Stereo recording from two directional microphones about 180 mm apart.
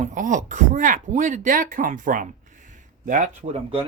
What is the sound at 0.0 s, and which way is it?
Speech, 45° right (ahead or behind).